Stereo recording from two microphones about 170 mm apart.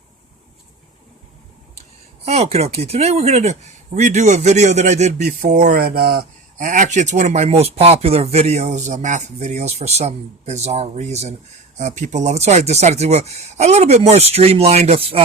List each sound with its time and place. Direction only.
2.2 s speech: 40° right (ahead or behind)